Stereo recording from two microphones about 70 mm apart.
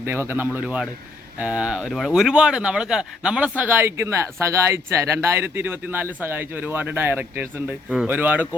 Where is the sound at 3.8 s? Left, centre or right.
Right.